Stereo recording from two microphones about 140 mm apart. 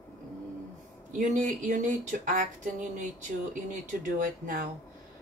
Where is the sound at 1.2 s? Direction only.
65° right (ahead or behind); by 4.7 s 85° right.